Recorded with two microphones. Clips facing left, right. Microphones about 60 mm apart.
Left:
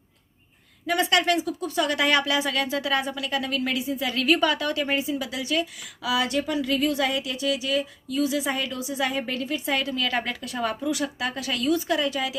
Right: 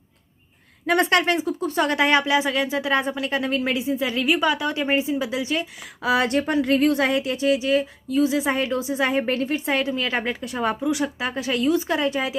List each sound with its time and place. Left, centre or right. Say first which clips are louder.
0.9 s speech: right 4 dB; right
1.2 s a woman's voice: right 2 dB; right